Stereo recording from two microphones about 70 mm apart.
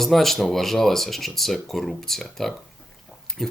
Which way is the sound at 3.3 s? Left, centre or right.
Centre.